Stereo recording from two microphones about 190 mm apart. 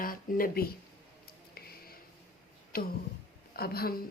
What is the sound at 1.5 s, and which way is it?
Music, 55° left (ahead or behind).